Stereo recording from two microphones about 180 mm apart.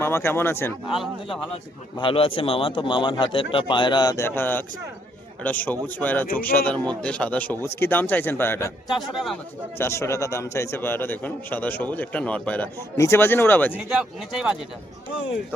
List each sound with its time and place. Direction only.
0.0 s a man's voice: 15° left (ahead or behind)
0.9 s speech: centre (ahead or behind)
2.0 s a man's voice: 30° left (ahead or behind); by 13.7 s 10° left (ahead or behind)
13.7 s speech: 5° right (ahead or behind)